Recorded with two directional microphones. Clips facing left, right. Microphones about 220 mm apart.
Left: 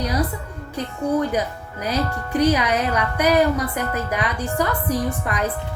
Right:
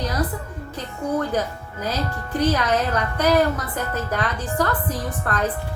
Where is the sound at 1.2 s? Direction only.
10° left (ahead or behind).